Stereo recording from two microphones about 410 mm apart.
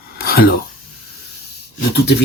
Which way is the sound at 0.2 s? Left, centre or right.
Left.